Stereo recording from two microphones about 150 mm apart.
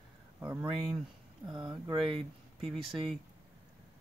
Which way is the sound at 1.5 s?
30° right (ahead or behind).